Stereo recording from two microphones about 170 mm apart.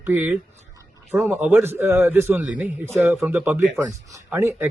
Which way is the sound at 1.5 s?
10° right (ahead or behind).